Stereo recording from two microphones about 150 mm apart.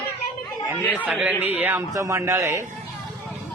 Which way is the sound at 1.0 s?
10° right (ahead or behind).